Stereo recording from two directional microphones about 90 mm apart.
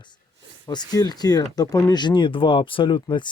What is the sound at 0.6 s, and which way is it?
Speech, 50° left (ahead or behind).